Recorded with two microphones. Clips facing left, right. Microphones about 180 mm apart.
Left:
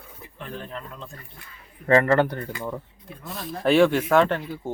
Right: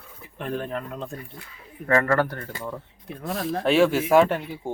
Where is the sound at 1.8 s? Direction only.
25° left (ahead or behind).